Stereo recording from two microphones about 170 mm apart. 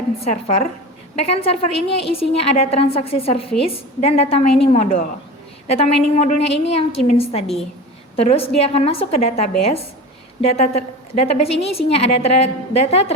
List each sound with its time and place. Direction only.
0.2 s a woman's voice: 40° left (ahead or behind)